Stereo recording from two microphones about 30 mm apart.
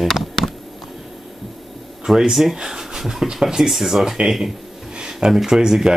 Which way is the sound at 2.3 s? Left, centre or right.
Centre.